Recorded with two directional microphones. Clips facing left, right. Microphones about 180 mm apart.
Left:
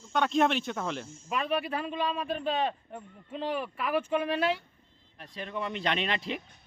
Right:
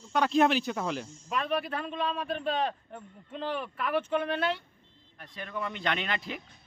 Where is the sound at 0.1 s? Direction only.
Centre (ahead or behind).